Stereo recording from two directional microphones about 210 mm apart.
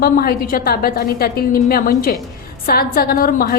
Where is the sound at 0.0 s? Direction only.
45° left (ahead or behind).